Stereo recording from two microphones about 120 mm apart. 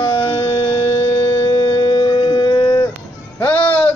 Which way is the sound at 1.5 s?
30° left (ahead or behind).